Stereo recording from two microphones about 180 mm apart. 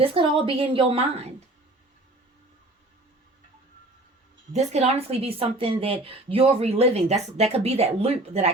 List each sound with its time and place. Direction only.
0.0 s speech: 30° right (ahead or behind)
4.5 s speech: 35° right (ahead or behind)